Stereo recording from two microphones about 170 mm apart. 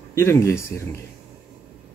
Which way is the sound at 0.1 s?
15° left (ahead or behind).